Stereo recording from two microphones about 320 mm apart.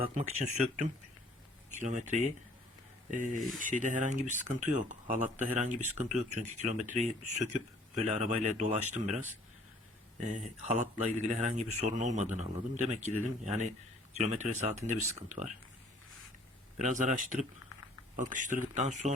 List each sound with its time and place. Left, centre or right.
0.0 s speech: right
10.2 s speech: right
16.7 s speech: right